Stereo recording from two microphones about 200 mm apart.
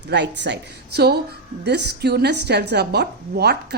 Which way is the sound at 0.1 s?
60° right (ahead or behind).